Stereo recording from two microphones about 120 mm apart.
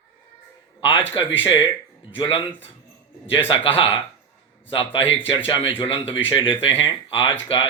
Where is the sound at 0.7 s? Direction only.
45° left (ahead or behind).